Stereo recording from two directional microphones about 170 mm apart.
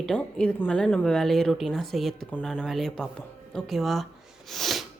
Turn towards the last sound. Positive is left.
turn(degrees=0)  # may be behind; listen again after turning